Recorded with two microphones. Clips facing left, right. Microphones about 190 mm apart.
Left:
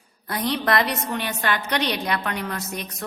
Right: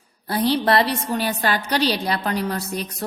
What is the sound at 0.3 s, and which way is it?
A woman's voice, 30° right (ahead or behind).